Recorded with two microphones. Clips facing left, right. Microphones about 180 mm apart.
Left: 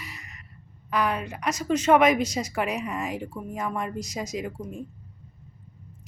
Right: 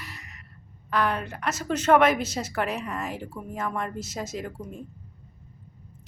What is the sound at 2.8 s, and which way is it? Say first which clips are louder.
Speech: left 2 dB; 10° left (ahead or behind).